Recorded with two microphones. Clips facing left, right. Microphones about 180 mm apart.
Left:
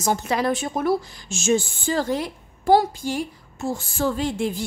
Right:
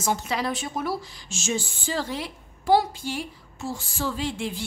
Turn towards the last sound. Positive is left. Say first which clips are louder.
# left 5 dB
turn(degrees=45)  # may be behind; listen again after turning